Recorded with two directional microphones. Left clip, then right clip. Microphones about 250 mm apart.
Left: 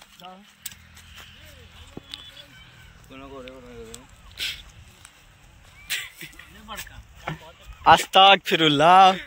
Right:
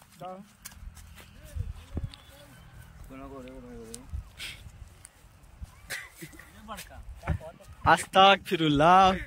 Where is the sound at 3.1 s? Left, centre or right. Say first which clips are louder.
Left 4 dB; centre.